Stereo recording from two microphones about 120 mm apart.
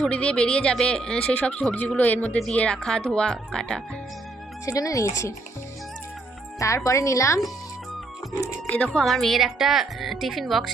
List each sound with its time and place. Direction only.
0.0 s speech: 10° left (ahead or behind)
4.6 s speech: 30° left (ahead or behind)
6.6 s speech: 25° left (ahead or behind)
8.7 s a woman's voice: 10° left (ahead or behind)